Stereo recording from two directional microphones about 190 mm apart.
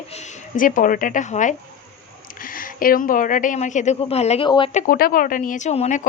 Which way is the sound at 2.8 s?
45° left (ahead or behind).